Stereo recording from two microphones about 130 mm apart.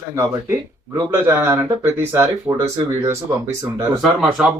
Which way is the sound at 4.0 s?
Centre (ahead or behind).